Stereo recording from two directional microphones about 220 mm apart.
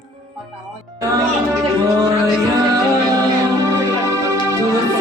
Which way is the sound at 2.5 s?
15° right (ahead or behind).